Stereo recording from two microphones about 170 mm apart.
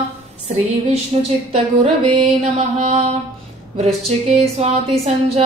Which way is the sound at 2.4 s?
35° right (ahead or behind).